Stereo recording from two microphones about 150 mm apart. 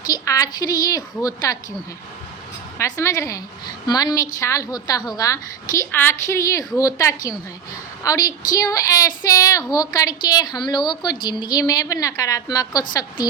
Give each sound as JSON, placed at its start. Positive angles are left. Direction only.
{"t": 0.0, "sound": "a woman's voice", "side_deg": 25}
{"t": 2.7, "sound": "a woman's voice", "side_deg": 20}